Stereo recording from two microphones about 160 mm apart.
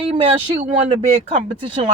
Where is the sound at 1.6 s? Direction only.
35° right (ahead or behind).